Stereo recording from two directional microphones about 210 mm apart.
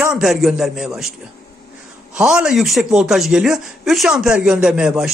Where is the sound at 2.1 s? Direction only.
5° right (ahead or behind).